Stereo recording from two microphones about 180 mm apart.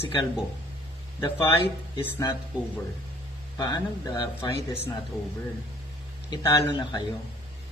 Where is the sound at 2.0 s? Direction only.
15° left (ahead or behind).